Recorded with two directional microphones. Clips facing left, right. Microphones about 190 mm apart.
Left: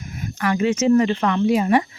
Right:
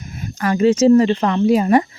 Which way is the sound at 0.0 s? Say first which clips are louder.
Right 2 dB; 30° right (ahead or behind).